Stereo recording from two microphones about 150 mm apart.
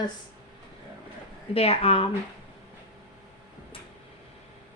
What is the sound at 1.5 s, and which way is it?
Speech, 40° left (ahead or behind).